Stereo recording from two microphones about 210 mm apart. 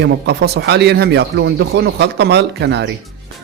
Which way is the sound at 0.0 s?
55° right (ahead or behind).